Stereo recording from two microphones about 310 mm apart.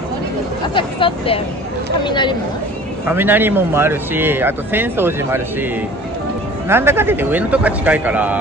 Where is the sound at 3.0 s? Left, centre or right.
Centre.